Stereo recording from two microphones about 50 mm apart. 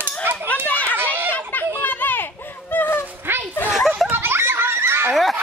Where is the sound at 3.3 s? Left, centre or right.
Right.